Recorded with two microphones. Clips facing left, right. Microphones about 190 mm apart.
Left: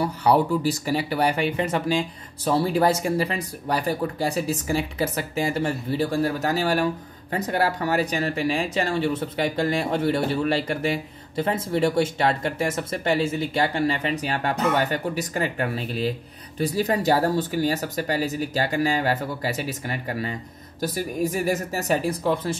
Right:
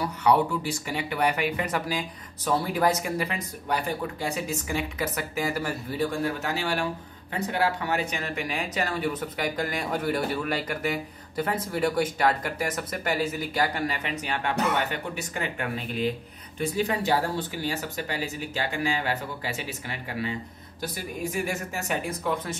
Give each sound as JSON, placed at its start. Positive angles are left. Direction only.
{"t": 0.0, "sound": "speech", "side_deg": 35}